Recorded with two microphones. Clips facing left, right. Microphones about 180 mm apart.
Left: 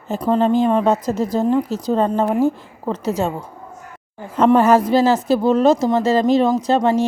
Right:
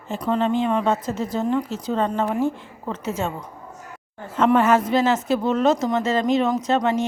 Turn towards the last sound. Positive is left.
turn(degrees=35)  # may be behind; listen again after turning